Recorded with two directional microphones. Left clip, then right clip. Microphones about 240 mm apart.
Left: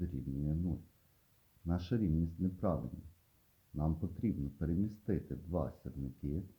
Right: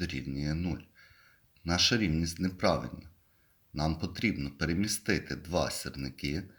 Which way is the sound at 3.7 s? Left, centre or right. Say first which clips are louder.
Right 7 dB; centre.